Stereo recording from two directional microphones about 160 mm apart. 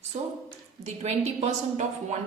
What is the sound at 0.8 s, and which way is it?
A woman's voice, 45° right (ahead or behind).